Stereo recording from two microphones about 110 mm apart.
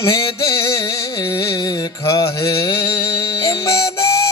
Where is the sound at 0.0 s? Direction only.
30° left (ahead or behind).